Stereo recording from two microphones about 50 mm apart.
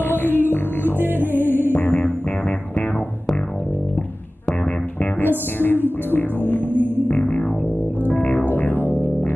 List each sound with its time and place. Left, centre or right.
0.1 s music: left
0.9 s music: right
1.7 s music: left
5.6 s music: left
7.1 s music: centre
8.5 s music: left